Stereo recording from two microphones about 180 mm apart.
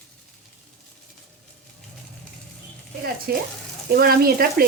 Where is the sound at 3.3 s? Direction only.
55° right (ahead or behind).